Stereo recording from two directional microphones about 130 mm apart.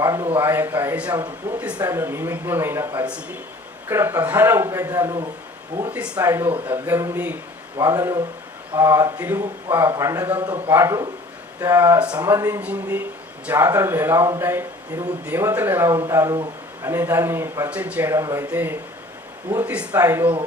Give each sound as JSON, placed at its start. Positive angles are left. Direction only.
{"t": 0.0, "sound": "a sound", "side_deg": -25}
{"t": 0.3, "sound": "speech", "side_deg": -15}
{"t": 1.8, "sound": "speech", "side_deg": -20}
{"t": 5.9, "sound": "speech", "side_deg": -10}
{"t": 17.7, "sound": "speech", "side_deg": -10}
{"t": 18.1, "sound": "speech", "side_deg": -25}